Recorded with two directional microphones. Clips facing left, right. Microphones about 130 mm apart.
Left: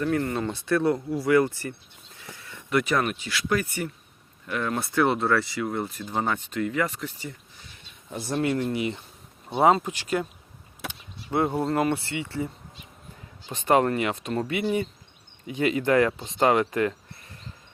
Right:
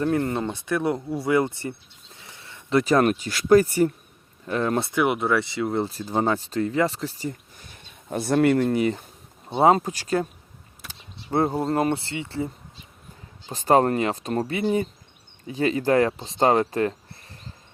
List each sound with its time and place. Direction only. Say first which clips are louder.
0.0 s speech: right 2 dB; 25° right (ahead or behind)
2.1 s a sound: left 2 dB; 25° right (ahead or behind)
3.0 s speech: right 7 dB; 40° right (ahead or behind)
4.9 s speech: left 2 dB; 15° right (ahead or behind); by 7.7 s 40° right (ahead or behind)
8.1 s speech: right 7 dB; 60° right (ahead or behind); by 9.0 s 45° right (ahead or behind)
9.5 s speech: right 2 dB; 25° right (ahead or behind)
9.7 s speech: right 3 dB; 40° right (ahead or behind)